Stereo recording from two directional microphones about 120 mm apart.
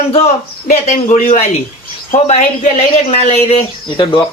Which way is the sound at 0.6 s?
65° left (ahead or behind).